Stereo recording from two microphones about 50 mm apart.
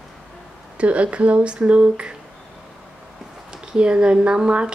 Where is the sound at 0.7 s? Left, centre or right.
Right.